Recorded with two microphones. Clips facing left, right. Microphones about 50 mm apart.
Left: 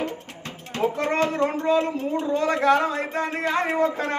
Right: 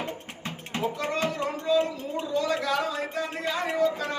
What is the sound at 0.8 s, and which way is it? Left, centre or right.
Speech, left.